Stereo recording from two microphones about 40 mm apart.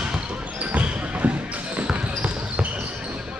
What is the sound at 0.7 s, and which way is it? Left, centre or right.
Basketball bounce, right.